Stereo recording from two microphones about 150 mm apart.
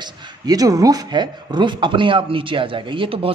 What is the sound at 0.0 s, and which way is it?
Speech, 25° right (ahead or behind).